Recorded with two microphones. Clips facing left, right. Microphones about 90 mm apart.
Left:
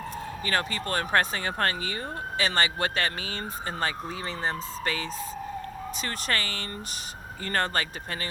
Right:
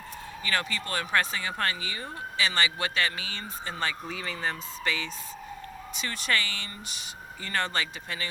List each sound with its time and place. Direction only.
0.4 s speech: 40° left (ahead or behind)